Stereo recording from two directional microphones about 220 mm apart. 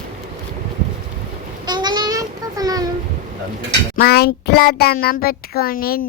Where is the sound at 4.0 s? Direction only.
45° left (ahead or behind).